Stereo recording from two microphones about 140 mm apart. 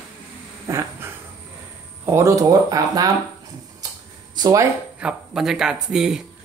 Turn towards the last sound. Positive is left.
turn(degrees=-5)  # may be behind; listen again after turning